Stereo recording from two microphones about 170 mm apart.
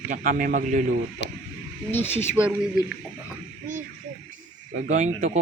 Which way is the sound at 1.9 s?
15° left (ahead or behind).